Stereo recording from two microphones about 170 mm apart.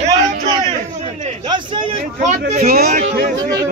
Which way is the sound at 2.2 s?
45° right (ahead or behind).